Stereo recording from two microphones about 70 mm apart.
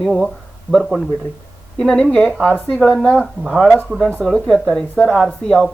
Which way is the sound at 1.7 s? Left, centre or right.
Centre.